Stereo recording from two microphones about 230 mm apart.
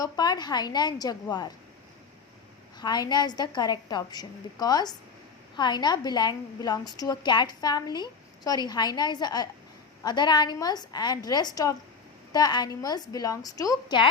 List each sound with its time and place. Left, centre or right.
0.0 s a woman's voice: centre
2.7 s a woman's voice: centre